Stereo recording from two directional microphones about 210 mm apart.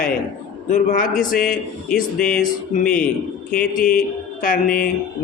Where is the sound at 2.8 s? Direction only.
5° left (ahead or behind).